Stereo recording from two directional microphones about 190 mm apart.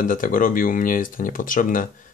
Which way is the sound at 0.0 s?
45° left (ahead or behind).